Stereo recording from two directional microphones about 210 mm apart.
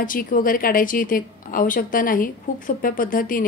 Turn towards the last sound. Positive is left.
turn(degrees=40)  # may be behind; listen again after turning